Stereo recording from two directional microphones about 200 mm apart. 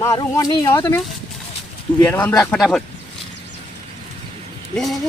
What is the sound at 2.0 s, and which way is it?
Speech, 10° left (ahead or behind).